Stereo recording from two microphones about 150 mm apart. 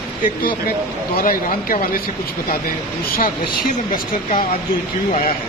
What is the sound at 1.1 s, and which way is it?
Speech, 70° left (ahead or behind).